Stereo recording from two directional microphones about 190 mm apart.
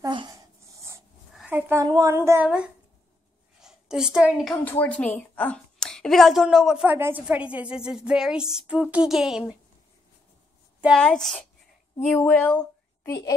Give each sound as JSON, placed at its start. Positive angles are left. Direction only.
{"t": 0.0, "sound": "a sound", "side_deg": -20}
{"t": 1.9, "sound": "a woman's voice", "side_deg": -20}
{"t": 4.6, "sound": "a woman's voice", "side_deg": 10}
{"t": 10.8, "sound": "a woman's voice", "side_deg": 0}